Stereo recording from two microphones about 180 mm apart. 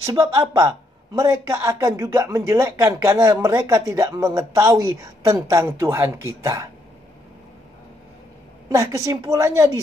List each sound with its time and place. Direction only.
0.0 s speech: 20° right (ahead or behind)
8.6 s speech: 15° right (ahead or behind)